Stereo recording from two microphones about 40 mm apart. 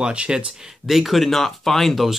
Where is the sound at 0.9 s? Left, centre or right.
Centre.